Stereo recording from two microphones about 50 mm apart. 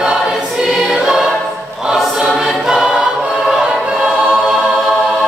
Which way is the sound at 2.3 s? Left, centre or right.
Centre.